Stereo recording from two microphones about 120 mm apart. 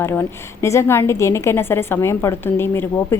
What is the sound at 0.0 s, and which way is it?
A woman's voice, 20° left (ahead or behind).